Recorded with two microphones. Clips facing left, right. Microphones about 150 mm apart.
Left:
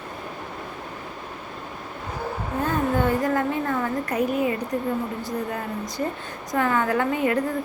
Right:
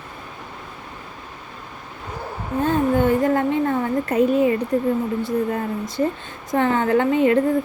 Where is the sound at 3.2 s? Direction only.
25° right (ahead or behind).